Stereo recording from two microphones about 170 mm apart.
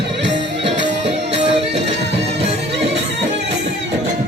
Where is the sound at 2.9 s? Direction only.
90° right.